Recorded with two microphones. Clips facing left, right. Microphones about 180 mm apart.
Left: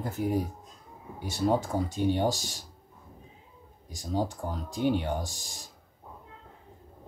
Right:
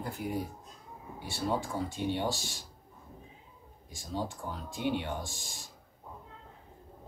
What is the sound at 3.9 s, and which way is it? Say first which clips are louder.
Speech: left 6 dB; 40° left (ahead or behind).